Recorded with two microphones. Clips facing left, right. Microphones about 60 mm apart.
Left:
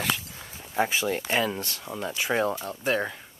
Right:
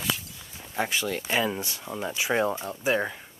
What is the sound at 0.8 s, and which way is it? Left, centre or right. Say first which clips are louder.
Speech: left 3 dB; centre.